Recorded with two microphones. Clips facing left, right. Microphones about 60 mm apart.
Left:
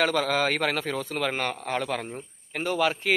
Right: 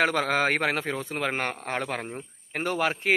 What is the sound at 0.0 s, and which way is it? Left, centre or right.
Speech, right.